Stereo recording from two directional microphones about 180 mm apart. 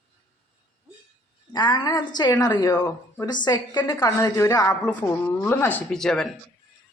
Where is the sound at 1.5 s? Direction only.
25° left (ahead or behind).